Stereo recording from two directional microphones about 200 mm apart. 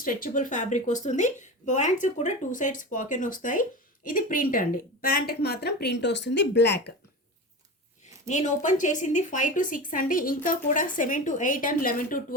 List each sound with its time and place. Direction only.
0.0 s speech: 45° left (ahead or behind)
8.3 s speech: 35° left (ahead or behind)